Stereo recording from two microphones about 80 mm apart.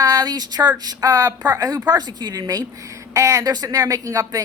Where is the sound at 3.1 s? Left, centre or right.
Right.